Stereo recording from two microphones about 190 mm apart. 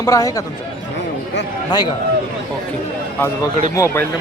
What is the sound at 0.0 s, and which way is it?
Speech, 15° left (ahead or behind).